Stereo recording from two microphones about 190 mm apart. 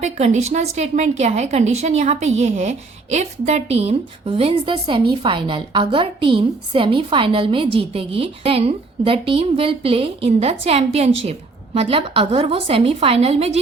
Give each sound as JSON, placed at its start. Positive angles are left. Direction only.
{"t": 0.0, "sound": "a woman's voice", "side_deg": -35}